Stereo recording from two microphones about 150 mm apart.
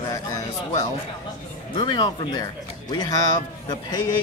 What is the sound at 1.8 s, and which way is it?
Speech, 30° left (ahead or behind).